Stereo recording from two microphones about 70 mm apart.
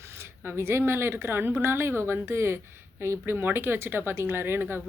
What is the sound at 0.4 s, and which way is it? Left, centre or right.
Speech, right.